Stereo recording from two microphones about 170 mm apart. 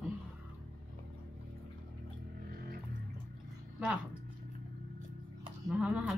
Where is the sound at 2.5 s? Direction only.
65° right (ahead or behind).